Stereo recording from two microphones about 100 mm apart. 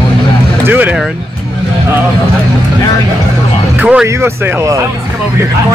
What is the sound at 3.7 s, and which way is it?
Speech, 15° right (ahead or behind).